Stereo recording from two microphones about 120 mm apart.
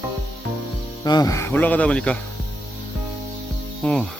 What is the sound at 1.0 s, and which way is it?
Speech, 35° left (ahead or behind).